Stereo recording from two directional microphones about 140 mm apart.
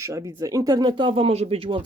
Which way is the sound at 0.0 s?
25° right (ahead or behind).